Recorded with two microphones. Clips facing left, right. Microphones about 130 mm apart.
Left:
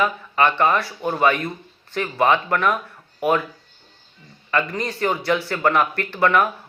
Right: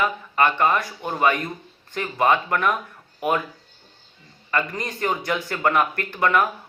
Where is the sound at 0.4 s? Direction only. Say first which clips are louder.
Left 2 dB; 15° right (ahead or behind).